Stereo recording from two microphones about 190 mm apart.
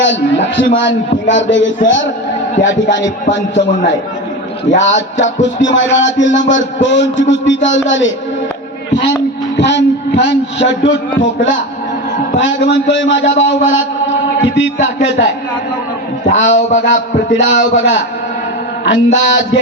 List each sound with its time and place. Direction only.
0.0 s a man's voice: 70° left (ahead or behind)
4.8 s a man's voice: 75° left (ahead or behind)
9.6 s a man's voice: 65° left (ahead or behind)
16.3 s a man's voice: 80° left